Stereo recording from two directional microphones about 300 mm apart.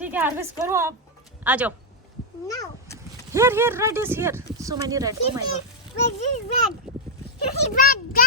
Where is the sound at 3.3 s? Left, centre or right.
Centre.